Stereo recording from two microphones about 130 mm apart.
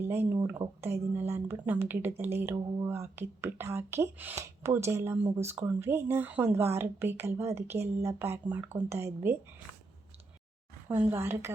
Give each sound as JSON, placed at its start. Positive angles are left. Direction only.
{"t": 0.0, "sound": "speech", "side_deg": -15}
{"t": 10.8, "sound": "speech", "side_deg": -20}